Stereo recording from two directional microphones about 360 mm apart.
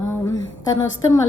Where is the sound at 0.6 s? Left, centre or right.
Centre.